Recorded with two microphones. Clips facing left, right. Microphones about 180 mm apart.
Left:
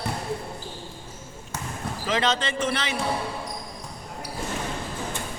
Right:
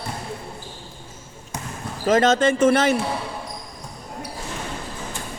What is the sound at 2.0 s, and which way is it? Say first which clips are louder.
Speech: right 9 dB; 45° right (ahead or behind).